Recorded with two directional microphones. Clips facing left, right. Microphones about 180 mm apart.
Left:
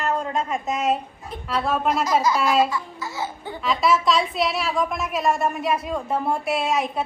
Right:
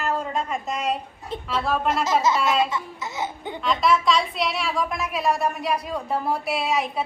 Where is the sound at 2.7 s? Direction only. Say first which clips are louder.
Left 1 dB; 20° right (ahead or behind).